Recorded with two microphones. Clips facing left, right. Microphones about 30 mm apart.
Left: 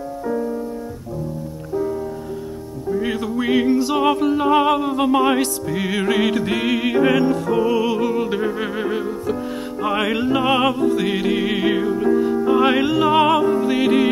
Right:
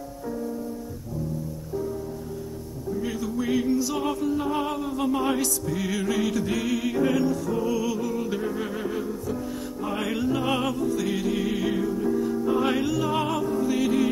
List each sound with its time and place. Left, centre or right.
2.9 s music: left
5.7 s music: left
5.9 s music: left